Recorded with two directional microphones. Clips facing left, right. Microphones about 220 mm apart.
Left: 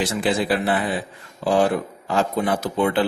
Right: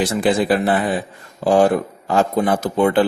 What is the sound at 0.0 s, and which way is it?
Speech, 45° right (ahead or behind).